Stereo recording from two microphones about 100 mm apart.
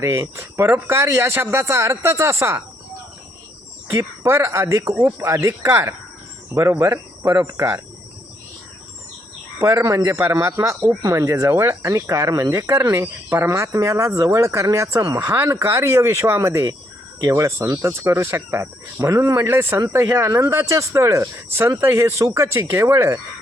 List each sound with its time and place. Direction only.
0.0 s speech: 30° right (ahead or behind)
3.9 s speech: 25° right (ahead or behind)
9.6 s speech: 30° right (ahead or behind)